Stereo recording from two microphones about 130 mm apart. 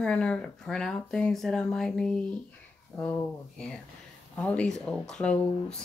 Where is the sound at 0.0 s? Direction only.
10° left (ahead or behind).